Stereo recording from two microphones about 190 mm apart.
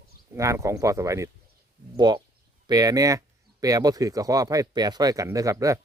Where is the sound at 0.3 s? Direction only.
15° right (ahead or behind).